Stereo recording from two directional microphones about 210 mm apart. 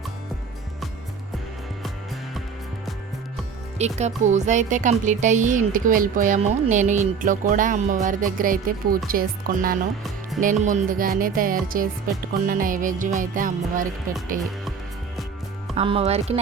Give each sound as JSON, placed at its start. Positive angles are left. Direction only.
{"t": 3.8, "sound": "speech", "side_deg": -30}
{"t": 15.7, "sound": "speech", "side_deg": -30}